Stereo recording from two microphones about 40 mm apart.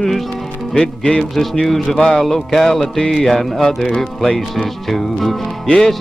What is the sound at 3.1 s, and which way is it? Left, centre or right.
Speech, centre.